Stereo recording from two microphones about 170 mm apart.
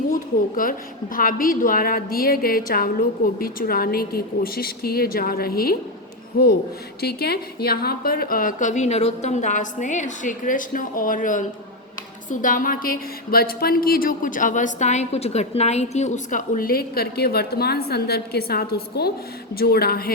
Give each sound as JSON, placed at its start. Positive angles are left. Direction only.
{"t": 0.1, "sound": "a woman's voice", "side_deg": 55}